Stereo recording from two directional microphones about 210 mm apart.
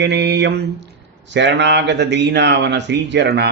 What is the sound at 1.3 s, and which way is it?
Speech, 55° right (ahead or behind).